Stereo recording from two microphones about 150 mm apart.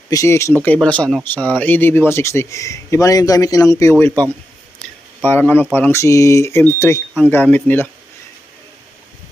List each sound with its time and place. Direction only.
0.1 s speech: 20° left (ahead or behind)
5.2 s speech: 15° left (ahead or behind)